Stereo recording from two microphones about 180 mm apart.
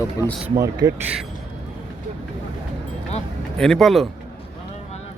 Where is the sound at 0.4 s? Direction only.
20° right (ahead or behind).